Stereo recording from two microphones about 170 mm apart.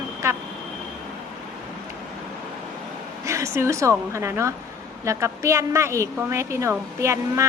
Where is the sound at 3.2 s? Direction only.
15° right (ahead or behind).